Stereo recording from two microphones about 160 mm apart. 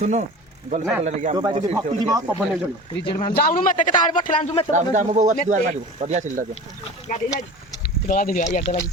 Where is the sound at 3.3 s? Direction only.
70° left (ahead or behind); by 4.5 s 55° left (ahead or behind).